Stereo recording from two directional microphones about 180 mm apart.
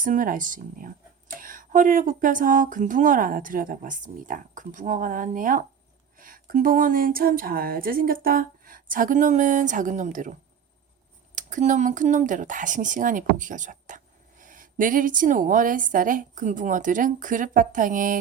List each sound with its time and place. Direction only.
0.0 s speech: 50° right (ahead or behind)
11.3 s speech: 45° right (ahead or behind)